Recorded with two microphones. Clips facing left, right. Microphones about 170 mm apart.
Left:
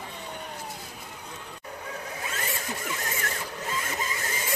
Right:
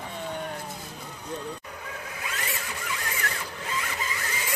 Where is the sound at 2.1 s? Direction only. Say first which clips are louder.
Even; 35° left (ahead or behind).